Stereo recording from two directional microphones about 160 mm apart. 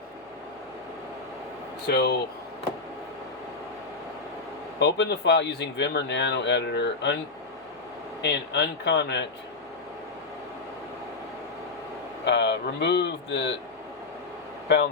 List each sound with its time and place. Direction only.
1.9 s speech: 90° left
4.8 s speech: 90° left
8.2 s speech: 90° left
12.2 s speech: 90° left